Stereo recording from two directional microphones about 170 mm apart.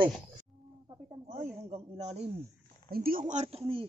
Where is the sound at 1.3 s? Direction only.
40° right (ahead or behind).